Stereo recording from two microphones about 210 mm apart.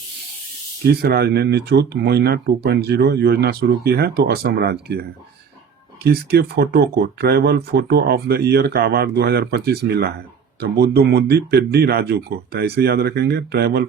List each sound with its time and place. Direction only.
0.9 s speech: 50° right (ahead or behind)
6.1 s speech: 50° right (ahead or behind)